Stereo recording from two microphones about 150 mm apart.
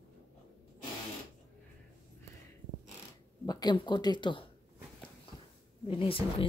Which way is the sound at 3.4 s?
30° left (ahead or behind).